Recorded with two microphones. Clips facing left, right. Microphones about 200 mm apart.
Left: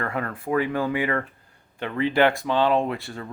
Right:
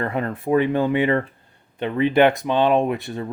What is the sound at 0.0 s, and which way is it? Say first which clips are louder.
Speech: right 4 dB; 25° right (ahead or behind).